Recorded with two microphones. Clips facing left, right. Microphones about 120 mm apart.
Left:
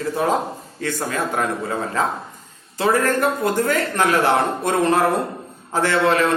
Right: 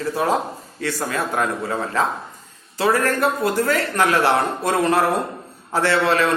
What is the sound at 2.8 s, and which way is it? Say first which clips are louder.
Speech: even; 25° left (ahead or behind).